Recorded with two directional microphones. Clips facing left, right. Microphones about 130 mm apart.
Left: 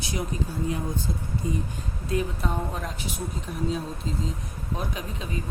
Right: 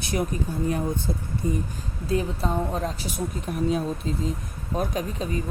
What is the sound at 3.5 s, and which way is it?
Speech, 60° right (ahead or behind).